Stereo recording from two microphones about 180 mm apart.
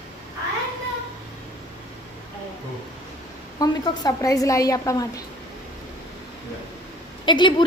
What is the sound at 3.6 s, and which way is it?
A woman's voice, 20° left (ahead or behind).